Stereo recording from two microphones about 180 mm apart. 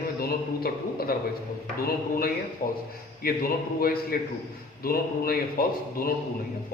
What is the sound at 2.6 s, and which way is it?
A man's voice, 55° left (ahead or behind).